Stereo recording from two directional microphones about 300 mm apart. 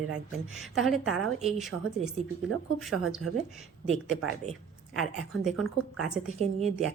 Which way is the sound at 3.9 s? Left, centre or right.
Right.